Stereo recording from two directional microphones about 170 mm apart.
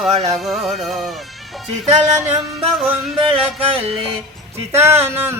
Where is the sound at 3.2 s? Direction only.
35° right (ahead or behind).